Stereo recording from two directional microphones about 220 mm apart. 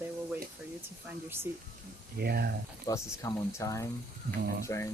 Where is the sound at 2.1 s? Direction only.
45° right (ahead or behind).